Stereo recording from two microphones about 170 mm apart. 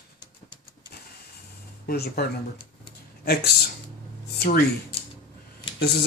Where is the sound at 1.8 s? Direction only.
65° left (ahead or behind).